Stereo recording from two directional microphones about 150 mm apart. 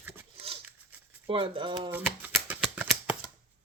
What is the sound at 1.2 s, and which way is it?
Speech, 35° right (ahead or behind).